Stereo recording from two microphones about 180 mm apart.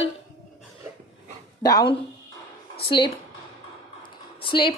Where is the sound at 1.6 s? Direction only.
20° left (ahead or behind).